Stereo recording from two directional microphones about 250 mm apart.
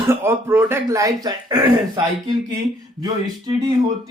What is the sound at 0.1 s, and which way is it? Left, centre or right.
Speech, centre.